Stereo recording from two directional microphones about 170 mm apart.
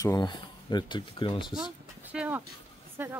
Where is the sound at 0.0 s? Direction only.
25° left (ahead or behind).